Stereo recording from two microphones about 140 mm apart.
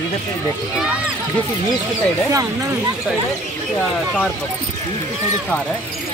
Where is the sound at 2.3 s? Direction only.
25° right (ahead or behind).